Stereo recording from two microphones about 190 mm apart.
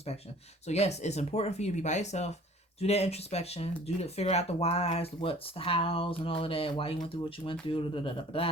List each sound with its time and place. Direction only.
0.7 s speech: 35° left (ahead or behind)